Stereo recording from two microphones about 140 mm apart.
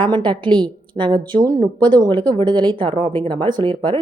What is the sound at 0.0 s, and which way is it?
A woman's voice, 35° right (ahead or behind).